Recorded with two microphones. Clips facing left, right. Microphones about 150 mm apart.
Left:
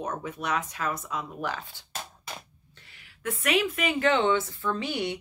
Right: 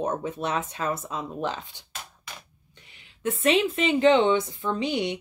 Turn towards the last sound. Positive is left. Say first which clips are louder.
# right 3 dB
turn(degrees=-20)  # may be behind; listen again after turning